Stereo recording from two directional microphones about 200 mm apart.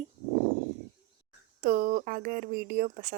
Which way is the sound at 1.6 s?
45° right (ahead or behind).